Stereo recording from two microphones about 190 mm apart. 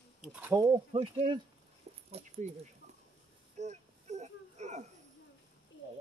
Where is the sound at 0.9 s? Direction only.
30° right (ahead or behind).